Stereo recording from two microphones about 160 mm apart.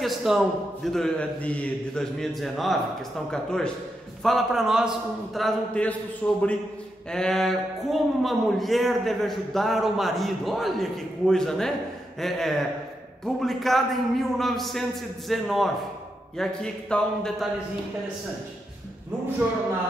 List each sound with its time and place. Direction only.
0.0 s a man's voice: centre (ahead or behind)